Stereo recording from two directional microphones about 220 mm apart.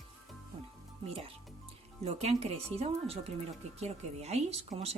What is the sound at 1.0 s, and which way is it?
Speech, 25° right (ahead or behind).